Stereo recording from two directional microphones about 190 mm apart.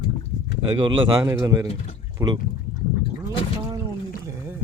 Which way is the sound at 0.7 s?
25° right (ahead or behind).